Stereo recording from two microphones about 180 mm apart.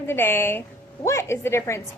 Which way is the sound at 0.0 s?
10° left (ahead or behind).